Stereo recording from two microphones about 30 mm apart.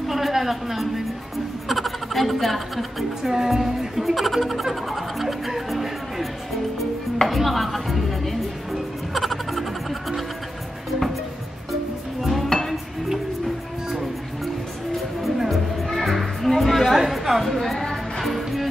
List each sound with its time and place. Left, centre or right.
0.1 s a woman's voice: centre
3.2 s music: centre
3.4 s speech: centre
5.7 s music: centre
7.2 s chopping: centre
9.1 s music: centre
12.2 s dishes: centre
12.4 s dishes: centre
15.4 s music: centre
16.9 s chatter: centre
18.2 s music: centre